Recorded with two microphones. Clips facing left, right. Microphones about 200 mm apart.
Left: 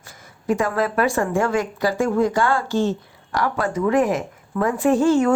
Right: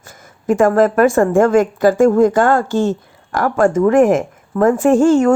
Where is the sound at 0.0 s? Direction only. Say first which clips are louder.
Right 5 dB; 45° right (ahead or behind).